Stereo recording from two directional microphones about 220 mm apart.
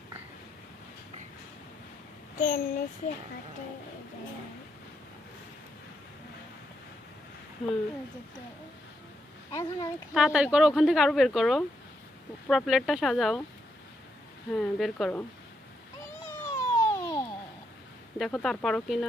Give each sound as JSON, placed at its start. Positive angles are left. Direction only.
{"t": 2.4, "sound": "a child's voice", "side_deg": 40}
{"t": 9.5, "sound": "speech", "side_deg": 15}
{"t": 10.2, "sound": "speech", "side_deg": -5}
{"t": 14.5, "sound": "speech", "side_deg": 0}
{"t": 16.5, "sound": "a sound", "side_deg": 15}
{"t": 18.2, "sound": "speech", "side_deg": 0}